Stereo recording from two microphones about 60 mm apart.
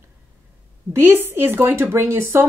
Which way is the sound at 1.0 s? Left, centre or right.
Right.